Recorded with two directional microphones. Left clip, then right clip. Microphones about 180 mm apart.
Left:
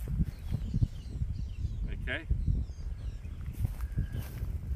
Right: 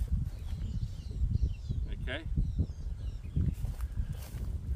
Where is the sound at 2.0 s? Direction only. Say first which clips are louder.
Left 3 dB; 10° right (ahead or behind).